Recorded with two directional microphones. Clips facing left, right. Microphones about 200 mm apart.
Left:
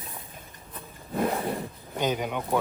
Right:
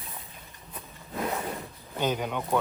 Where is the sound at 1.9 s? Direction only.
10° left (ahead or behind).